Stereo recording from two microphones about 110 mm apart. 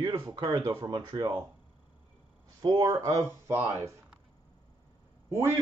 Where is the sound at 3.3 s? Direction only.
25° right (ahead or behind).